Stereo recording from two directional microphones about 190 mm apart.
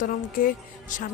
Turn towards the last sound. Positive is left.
turn(degrees=45)  # may be behind; listen again after turning